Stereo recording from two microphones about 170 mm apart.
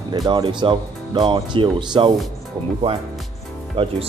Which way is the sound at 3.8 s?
30° right (ahead or behind).